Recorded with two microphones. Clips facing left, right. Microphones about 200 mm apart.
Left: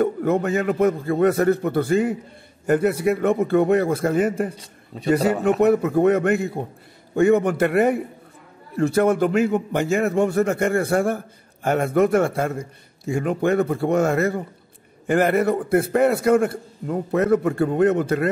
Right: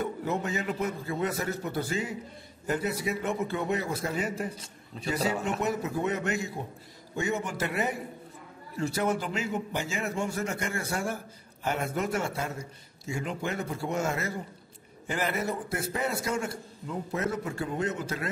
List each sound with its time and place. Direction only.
0.0 s a man's voice: 55° left (ahead or behind)